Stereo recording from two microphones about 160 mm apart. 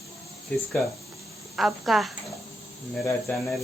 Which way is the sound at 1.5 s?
Centre (ahead or behind).